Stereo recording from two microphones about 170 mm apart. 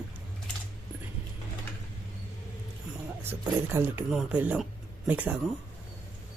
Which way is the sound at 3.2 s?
10° right (ahead or behind).